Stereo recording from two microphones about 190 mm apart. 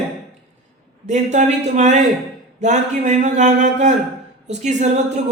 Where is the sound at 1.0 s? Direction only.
40° right (ahead or behind).